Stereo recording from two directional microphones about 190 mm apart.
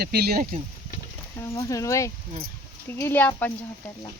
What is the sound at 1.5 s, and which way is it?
Speech, 15° left (ahead or behind).